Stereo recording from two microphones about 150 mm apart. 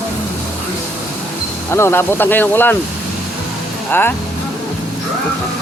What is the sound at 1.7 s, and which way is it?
Speech, 15° left (ahead or behind).